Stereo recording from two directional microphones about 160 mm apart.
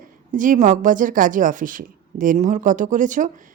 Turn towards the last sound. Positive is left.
turn(degrees=-55)  # may be behind; listen again after turning